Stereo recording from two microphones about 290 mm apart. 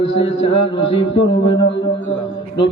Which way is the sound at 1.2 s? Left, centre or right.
Centre.